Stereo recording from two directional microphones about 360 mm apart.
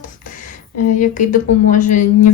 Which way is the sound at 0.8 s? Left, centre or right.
Left.